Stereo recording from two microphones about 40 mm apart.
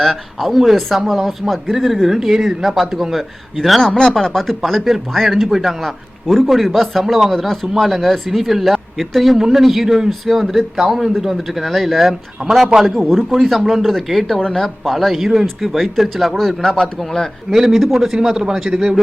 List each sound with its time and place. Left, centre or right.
0.0 s speech: centre
3.8 s speech: centre
17.5 s speech: centre